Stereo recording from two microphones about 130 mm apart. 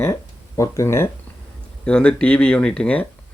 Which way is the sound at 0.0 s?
25° left (ahead or behind).